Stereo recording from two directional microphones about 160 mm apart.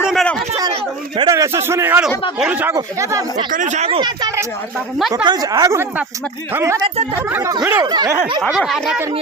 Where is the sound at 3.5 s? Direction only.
50° right (ahead or behind).